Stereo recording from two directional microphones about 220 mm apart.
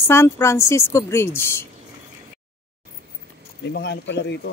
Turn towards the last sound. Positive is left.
turn(degrees=50)  # may be behind; listen again after turning